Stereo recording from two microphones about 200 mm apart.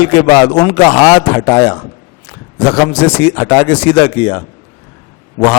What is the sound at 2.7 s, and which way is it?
A man's voice, 25° left (ahead or behind).